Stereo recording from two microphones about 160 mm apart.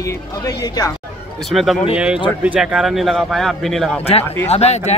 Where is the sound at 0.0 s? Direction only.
20° left (ahead or behind).